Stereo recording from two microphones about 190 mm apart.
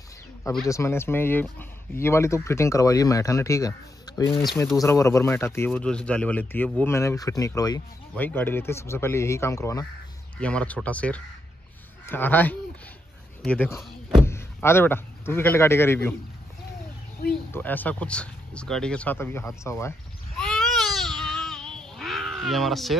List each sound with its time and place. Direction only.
0.4 s speech: 5° left (ahead or behind)
17.3 s speech: 10° left (ahead or behind)
20.3 s baby cry: centre (ahead or behind)